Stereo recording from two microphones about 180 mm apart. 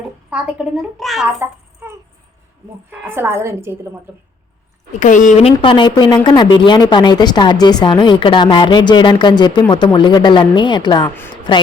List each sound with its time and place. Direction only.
0.3 s a woman's voice: 5° right (ahead or behind)
1.4 s a sound: 15° right (ahead or behind)
2.9 s a woman's voice: 10° right (ahead or behind)
4.9 s a woman's voice: 45° left (ahead or behind); by 11.6 s 25° left (ahead or behind)